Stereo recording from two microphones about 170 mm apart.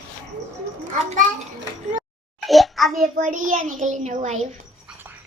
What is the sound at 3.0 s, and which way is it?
A child's voice, 50° right (ahead or behind).